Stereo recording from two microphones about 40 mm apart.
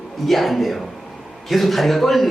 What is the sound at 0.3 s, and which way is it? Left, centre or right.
A man's voice, centre.